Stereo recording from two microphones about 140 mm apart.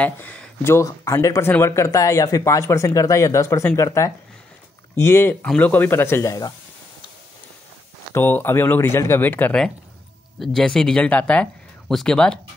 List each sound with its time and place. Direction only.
0.0 s speech: 10° left (ahead or behind)
8.1 s speech: 15° left (ahead or behind)